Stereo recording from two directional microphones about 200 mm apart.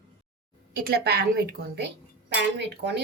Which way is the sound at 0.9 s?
50° right (ahead or behind).